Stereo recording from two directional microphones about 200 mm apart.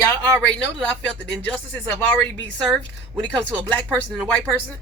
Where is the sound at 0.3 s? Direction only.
5° left (ahead or behind).